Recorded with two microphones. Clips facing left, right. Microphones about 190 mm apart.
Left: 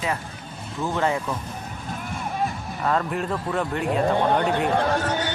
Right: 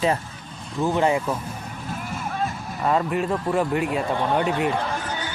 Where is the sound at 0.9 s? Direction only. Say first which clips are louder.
Right 2 dB; 15° right (ahead or behind).